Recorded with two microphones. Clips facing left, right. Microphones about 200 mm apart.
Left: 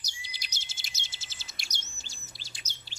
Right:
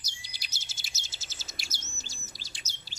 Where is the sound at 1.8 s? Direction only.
40° right (ahead or behind).